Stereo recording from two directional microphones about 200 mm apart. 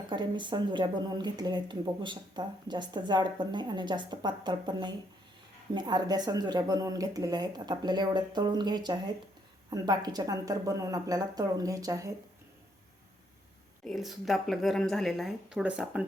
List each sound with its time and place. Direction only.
0.1 s a woman's voice: 25° right (ahead or behind)
13.8 s a woman's voice: centre (ahead or behind)